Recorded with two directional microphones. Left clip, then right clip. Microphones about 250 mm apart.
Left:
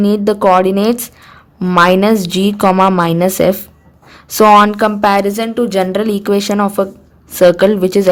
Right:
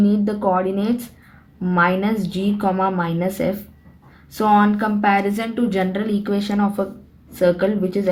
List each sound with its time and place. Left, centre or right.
0.0 s a woman's voice: left